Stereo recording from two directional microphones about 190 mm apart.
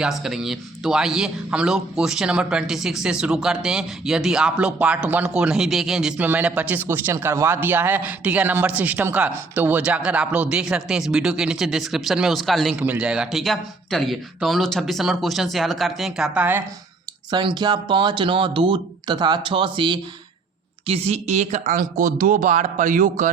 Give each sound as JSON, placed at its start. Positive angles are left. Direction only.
{"t": 0.0, "sound": "speech", "side_deg": 0}
{"t": 17.3, "sound": "speech", "side_deg": -25}